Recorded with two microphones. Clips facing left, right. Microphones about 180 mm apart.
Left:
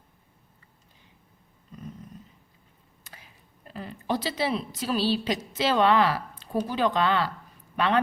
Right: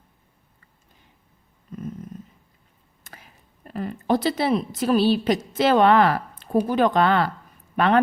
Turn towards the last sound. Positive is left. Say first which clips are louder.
# right 5 dB
turn(degrees=-50)  # may be behind; listen again after turning